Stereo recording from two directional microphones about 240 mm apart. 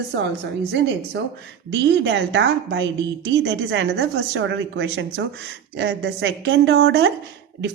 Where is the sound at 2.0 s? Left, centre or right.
Right.